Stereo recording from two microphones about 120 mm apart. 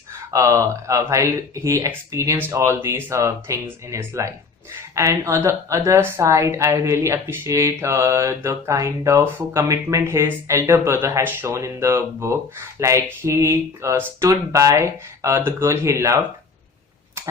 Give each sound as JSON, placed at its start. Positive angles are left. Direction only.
{"t": 0.3, "sound": "a woman's voice", "side_deg": -25}